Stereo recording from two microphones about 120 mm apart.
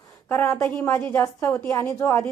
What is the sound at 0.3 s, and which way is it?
Speech, 20° left (ahead or behind).